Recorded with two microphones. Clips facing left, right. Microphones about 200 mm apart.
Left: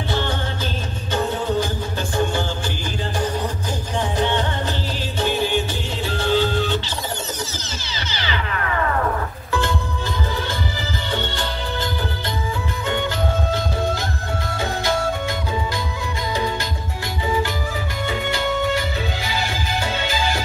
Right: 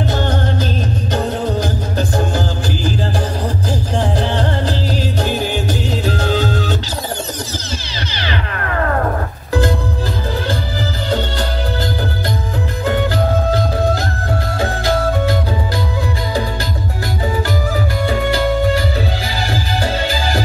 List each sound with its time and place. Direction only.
0.1 s music: 40° right (ahead or behind)
4.0 s music: 35° right (ahead or behind)
8.3 s music: 45° right (ahead or behind)
11.1 s music: 40° right (ahead or behind)
18.0 s music: 35° right (ahead or behind)